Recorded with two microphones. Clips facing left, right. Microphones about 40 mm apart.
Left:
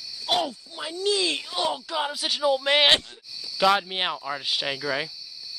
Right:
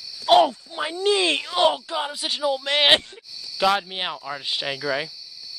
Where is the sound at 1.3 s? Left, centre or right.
Right.